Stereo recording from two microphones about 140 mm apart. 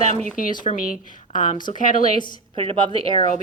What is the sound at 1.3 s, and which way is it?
Speech, 70° left (ahead or behind).